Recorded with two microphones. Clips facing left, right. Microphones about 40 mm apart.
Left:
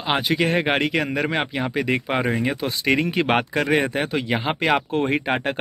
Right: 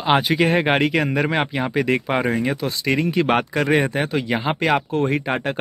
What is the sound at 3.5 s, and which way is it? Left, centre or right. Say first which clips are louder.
Speech: right 2 dB; centre.